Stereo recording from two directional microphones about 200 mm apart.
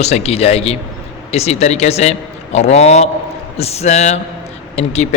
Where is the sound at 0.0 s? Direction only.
30° left (ahead or behind).